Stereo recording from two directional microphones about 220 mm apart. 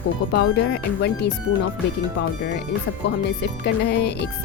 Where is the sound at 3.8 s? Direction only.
50° left (ahead or behind).